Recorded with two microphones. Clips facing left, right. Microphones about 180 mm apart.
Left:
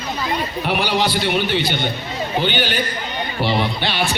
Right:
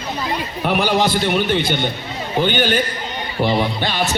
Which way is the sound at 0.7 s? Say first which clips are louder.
Right 3 dB; 50° right (ahead or behind).